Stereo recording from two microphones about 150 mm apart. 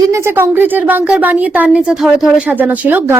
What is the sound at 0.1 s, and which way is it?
Speech, 15° right (ahead or behind).